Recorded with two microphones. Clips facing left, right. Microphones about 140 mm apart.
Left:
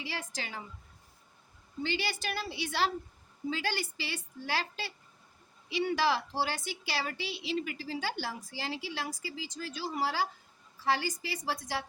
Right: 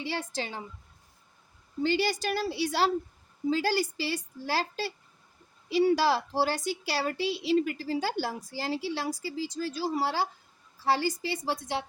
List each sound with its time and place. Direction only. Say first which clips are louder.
0.0 s speech: right 6 dB; 30° right (ahead or behind)
1.8 s a woman's voice: right 7 dB; 40° right (ahead or behind); by 11.9 s 25° right (ahead or behind)